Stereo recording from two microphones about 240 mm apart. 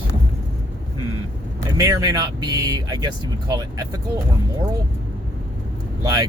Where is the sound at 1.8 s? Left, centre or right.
Centre.